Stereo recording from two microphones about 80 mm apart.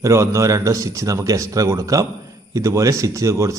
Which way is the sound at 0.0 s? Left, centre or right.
Right.